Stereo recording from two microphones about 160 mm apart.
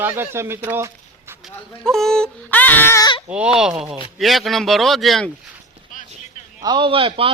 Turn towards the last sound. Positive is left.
turn(degrees=-35)  # may be behind; listen again after turning